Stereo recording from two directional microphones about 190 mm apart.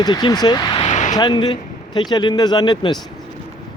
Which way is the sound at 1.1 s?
20° left (ahead or behind).